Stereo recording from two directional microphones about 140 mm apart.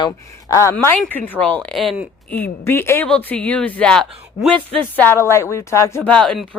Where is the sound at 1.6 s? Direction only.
Centre (ahead or behind).